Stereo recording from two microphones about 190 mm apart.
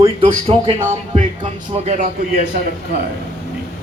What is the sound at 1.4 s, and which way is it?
A man's voice, 35° right (ahead or behind).